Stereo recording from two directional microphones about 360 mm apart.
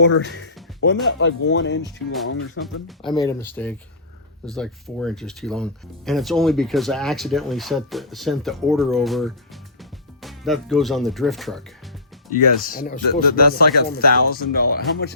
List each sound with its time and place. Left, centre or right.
0.0 s speech: left
3.2 s speech: centre
12.3 s speech: left